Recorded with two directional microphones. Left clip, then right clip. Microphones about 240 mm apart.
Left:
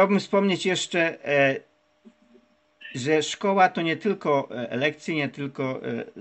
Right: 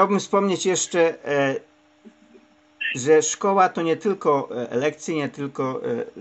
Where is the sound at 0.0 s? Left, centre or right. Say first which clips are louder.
Right 2 dB; left.